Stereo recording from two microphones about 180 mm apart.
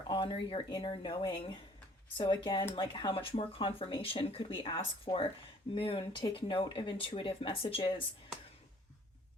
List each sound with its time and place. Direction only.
0.1 s speech: 30° left (ahead or behind)